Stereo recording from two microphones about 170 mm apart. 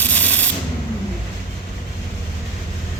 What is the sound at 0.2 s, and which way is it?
Rub, 10° left (ahead or behind).